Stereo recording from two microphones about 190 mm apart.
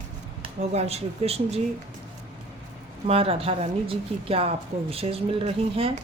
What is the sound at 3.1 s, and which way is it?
Speech, 30° right (ahead or behind).